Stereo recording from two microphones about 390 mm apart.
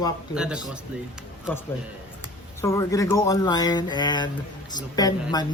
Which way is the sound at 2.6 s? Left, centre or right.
Centre.